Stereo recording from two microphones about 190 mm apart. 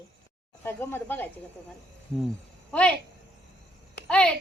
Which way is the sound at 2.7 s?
5° left (ahead or behind).